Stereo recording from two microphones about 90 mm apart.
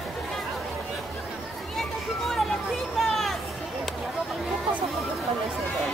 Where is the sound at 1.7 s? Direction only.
5° left (ahead or behind).